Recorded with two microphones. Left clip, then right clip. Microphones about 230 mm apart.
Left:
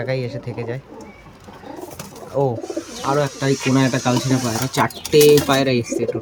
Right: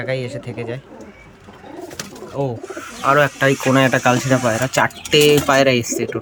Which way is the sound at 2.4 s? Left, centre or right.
Centre.